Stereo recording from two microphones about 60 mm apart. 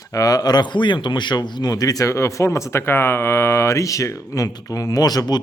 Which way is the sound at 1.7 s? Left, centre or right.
Left.